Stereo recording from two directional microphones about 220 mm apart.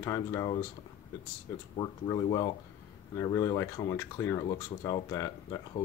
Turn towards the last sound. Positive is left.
turn(degrees=15)  # may be behind; listen again after turning